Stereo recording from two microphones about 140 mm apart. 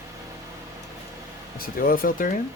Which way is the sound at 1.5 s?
90° left.